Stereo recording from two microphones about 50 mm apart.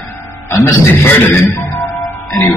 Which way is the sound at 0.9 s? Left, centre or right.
Left.